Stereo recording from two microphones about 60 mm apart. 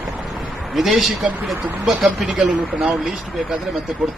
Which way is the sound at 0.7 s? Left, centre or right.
Centre.